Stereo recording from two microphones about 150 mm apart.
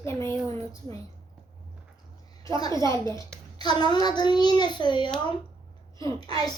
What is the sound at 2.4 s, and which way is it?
Speech, 20° left (ahead or behind).